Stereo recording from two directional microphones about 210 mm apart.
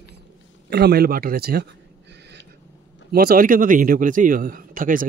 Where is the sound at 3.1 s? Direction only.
45° right (ahead or behind).